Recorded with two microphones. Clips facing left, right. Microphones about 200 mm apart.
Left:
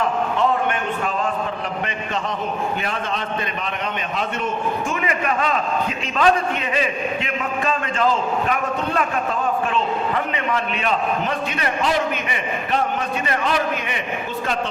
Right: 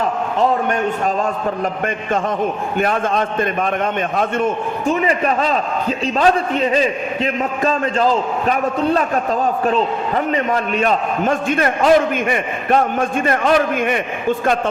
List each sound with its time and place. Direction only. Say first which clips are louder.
0.3 s a man's voice: right 6 dB; 40° right (ahead or behind)
2.7 s a man's voice: right 8 dB; 50° right (ahead or behind)
4.9 s a man's voice: right 11 dB; 35° right (ahead or behind)
10.3 s a man's voice: right 6 dB; 45° right (ahead or behind)